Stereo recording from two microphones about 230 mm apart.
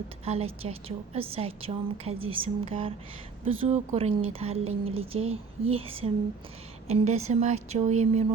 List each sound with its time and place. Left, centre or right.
0.3 s a woman's voice: right